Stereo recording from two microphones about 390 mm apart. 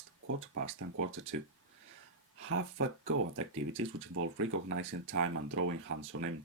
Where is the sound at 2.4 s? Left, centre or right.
Right.